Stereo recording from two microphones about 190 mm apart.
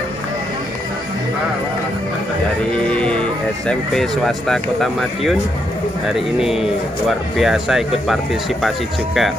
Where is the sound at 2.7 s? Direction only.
5° left (ahead or behind).